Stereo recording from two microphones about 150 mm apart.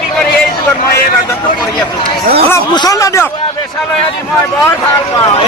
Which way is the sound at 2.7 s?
25° left (ahead or behind).